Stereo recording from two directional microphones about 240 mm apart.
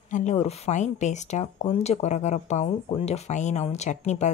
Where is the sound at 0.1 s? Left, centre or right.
Left.